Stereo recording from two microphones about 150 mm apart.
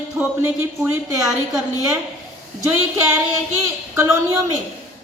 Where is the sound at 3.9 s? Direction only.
15° right (ahead or behind).